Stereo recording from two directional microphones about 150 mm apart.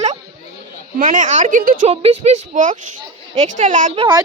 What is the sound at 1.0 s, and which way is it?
Speech, 60° right (ahead or behind).